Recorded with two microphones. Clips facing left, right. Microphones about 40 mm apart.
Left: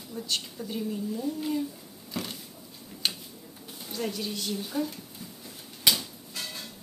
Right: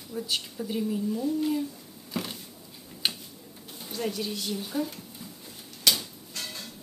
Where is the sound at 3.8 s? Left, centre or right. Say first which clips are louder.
Right 1 dB; centre.